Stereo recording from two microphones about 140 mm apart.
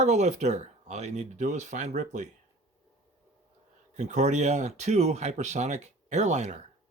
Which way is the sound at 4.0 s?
55° right (ahead or behind).